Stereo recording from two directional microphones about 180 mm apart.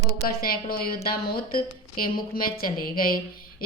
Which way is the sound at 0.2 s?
55° left (ahead or behind).